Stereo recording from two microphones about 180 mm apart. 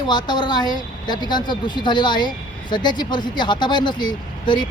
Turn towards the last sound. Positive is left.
turn(degrees=25)  # may be behind; listen again after turning